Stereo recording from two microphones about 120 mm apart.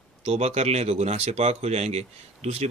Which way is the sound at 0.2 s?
60° right (ahead or behind).